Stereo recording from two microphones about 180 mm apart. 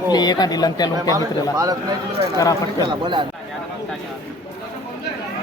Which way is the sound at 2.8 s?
25° right (ahead or behind).